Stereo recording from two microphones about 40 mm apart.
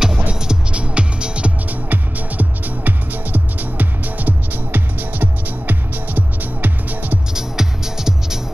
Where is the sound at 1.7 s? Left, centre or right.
Right.